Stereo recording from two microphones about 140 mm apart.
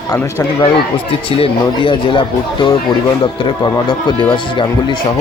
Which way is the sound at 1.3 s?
40° left (ahead or behind).